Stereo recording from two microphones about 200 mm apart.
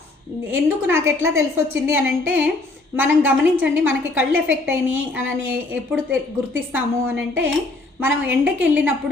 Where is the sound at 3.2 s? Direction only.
80° right.